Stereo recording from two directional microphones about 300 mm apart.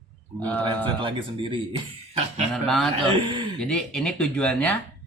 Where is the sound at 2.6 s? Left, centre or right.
Centre.